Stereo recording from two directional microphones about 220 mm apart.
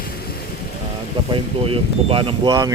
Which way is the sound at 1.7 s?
25° right (ahead or behind).